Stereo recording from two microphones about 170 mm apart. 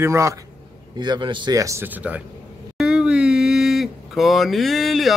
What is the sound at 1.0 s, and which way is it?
Speech, 25° right (ahead or behind).